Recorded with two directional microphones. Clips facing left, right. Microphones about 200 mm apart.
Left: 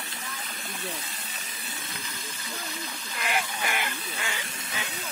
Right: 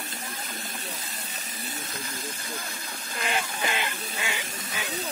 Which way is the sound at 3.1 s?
25° right (ahead or behind).